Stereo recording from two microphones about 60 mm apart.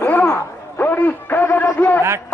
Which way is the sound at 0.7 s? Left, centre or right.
Left.